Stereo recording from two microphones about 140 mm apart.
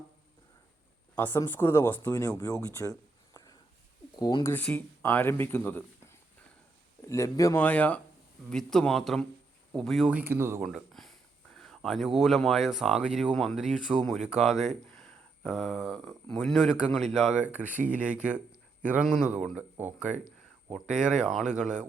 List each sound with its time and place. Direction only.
1.1 s speech: 15° left (ahead or behind)
4.2 s speech: 35° left (ahead or behind)
4.4 s speech: 15° left (ahead or behind)
7.6 s speech: 10° left (ahead or behind)
10.1 s speech: 15° right (ahead or behind)
10.6 s speech: 5° right (ahead or behind)